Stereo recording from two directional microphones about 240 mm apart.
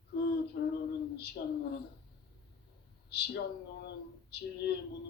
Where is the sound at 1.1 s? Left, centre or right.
Left.